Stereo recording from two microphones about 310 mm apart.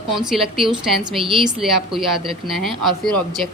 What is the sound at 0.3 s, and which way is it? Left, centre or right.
Speech, centre.